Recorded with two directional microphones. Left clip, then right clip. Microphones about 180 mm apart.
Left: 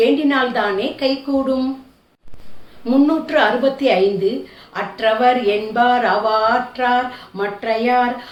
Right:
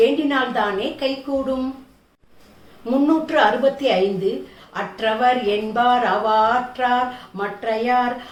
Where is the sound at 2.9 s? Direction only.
15° left (ahead or behind).